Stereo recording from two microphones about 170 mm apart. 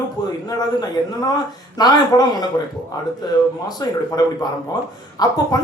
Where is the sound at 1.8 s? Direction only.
25° left (ahead or behind).